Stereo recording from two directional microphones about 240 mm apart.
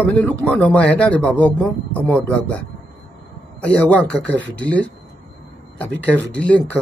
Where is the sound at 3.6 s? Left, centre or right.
Centre.